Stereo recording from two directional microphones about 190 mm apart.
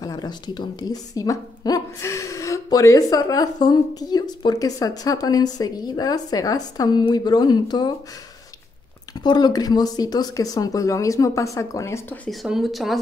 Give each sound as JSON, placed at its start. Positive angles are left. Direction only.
{"t": 0.0, "sound": "a woman's voice", "side_deg": 20}
{"t": 9.1, "sound": "a woman's voice", "side_deg": 20}
{"t": 12.3, "sound": "speech", "side_deg": 0}